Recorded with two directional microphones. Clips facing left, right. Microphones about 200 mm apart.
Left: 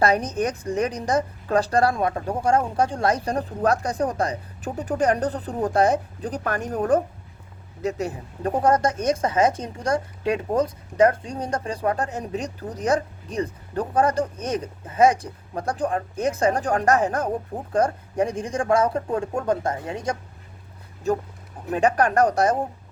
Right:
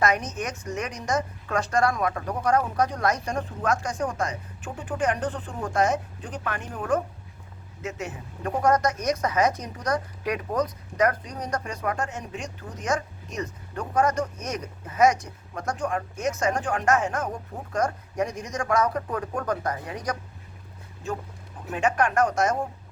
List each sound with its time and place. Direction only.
0.0 s speech: 30° left (ahead or behind)
21.1 s speech: 40° left (ahead or behind)